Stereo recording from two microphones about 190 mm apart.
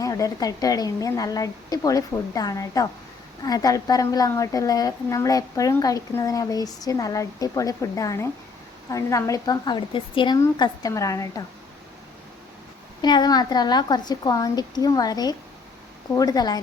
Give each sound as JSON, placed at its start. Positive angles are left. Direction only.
{"t": 0.0, "sound": "a woman's voice", "side_deg": 15}
{"t": 13.0, "sound": "a woman's voice", "side_deg": 20}